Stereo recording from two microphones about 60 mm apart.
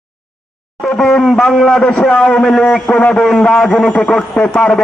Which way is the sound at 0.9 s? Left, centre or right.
Centre.